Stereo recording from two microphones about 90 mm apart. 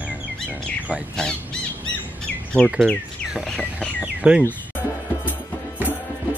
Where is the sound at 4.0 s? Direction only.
10° right (ahead or behind).